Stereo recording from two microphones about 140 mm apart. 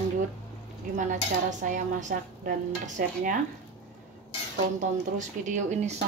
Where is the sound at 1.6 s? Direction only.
70° right (ahead or behind).